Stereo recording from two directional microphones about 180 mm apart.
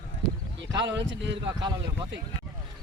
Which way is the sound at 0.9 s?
80° right.